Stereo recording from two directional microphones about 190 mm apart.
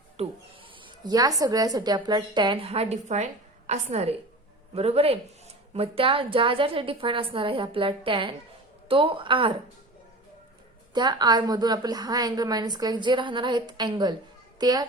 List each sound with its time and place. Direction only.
0.2 s a woman's voice: 25° right (ahead or behind)
10.9 s a child's voice: 20° right (ahead or behind)